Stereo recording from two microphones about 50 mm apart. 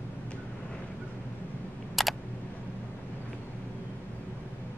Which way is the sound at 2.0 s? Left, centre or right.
Centre.